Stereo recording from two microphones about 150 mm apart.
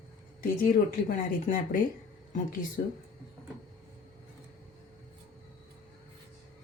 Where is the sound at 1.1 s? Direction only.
60° left (ahead or behind).